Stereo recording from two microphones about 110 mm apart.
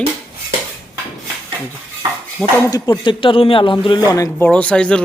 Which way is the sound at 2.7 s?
40° left (ahead or behind).